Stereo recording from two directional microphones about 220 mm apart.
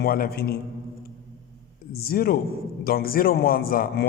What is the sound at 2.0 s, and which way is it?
A man's voice, 45° left (ahead or behind).